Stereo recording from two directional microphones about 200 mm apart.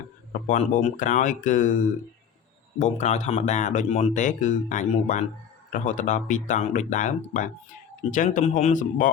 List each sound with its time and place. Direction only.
0.4 s speech: 40° left (ahead or behind)
2.7 s speech: 35° left (ahead or behind)